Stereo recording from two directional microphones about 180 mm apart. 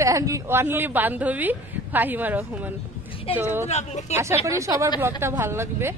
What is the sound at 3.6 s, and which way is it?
Speech, 40° left (ahead or behind).